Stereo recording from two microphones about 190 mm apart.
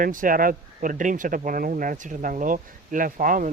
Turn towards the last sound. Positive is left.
turn(degrees=-45)  # may be behind; listen again after turning